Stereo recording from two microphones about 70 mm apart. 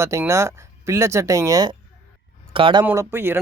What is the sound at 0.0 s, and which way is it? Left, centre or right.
Speech, right.